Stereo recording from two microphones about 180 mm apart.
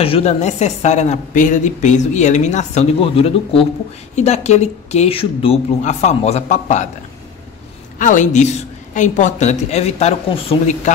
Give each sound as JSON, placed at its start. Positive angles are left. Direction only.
{"t": 0.0, "sound": "a woman's voice", "side_deg": 35}
{"t": 8.0, "sound": "a woman's voice", "side_deg": 45}